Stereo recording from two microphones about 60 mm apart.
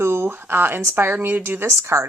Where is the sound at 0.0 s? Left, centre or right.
Right.